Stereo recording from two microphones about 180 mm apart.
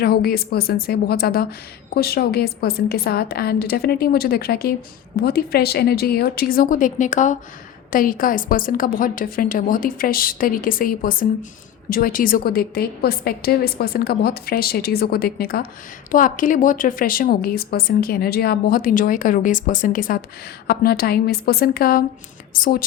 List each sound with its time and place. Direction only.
0.0 s a woman's voice: 60° left (ahead or behind)